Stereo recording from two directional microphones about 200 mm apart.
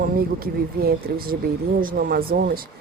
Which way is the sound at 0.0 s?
50° right (ahead or behind).